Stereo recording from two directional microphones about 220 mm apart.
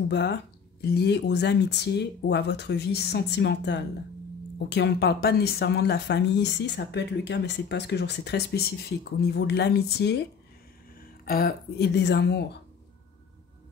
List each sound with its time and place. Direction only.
0.1 s speech: 50° left (ahead or behind)